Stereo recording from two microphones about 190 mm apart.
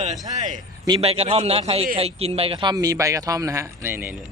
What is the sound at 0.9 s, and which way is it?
A man's voice, 25° right (ahead or behind).